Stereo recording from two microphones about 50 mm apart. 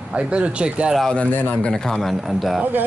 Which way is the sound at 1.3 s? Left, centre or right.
Left.